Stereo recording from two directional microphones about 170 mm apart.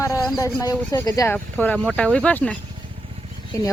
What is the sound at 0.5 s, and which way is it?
Speech, 20° left (ahead or behind).